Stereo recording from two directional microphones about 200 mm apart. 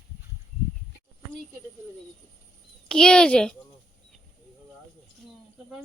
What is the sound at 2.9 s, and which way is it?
Speech, 5° left (ahead or behind).